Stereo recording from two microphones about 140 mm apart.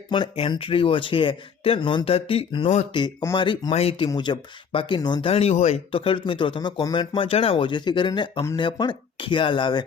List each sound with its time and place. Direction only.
0.1 s speech: 40° left (ahead or behind)
3.7 s speech: 45° left (ahead or behind)
5.3 s speech: 45° left (ahead or behind)